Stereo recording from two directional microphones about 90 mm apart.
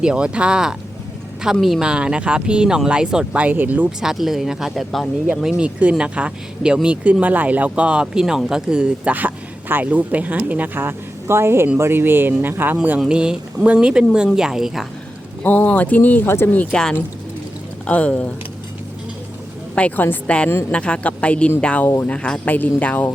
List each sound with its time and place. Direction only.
0.0 s speech: 10° right (ahead or behind)
4.0 s speech: 5° right (ahead or behind)
15.4 s speech: 20° left (ahead or behind)
17.8 s speech: 15° left (ahead or behind)
19.7 s speech: 15° left (ahead or behind)